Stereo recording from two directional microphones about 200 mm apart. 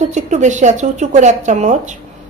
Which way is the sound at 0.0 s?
35° right (ahead or behind).